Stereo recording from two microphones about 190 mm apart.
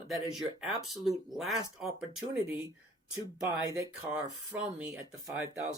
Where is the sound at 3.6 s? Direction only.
15° right (ahead or behind).